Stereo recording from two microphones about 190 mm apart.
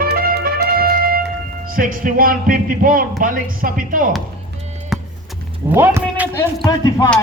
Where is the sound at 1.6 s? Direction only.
45° right (ahead or behind).